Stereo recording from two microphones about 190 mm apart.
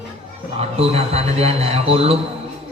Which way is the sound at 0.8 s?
30° right (ahead or behind).